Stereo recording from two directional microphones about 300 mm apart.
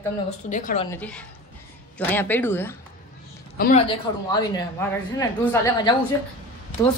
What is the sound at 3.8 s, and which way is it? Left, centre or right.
Speech, centre.